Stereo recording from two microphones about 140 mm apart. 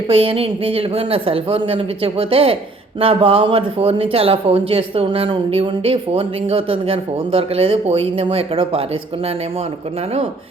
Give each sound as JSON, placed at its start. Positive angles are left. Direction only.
{"t": 0.1, "sound": "speech", "side_deg": -40}